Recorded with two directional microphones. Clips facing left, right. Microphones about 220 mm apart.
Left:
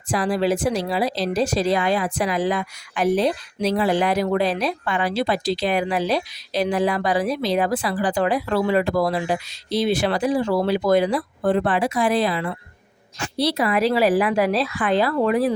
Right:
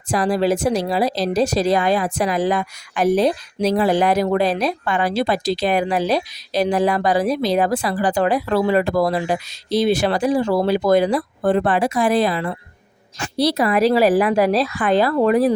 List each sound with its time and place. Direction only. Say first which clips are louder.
0.1 s a woman's voice: right 3 dB; 40° right (ahead or behind)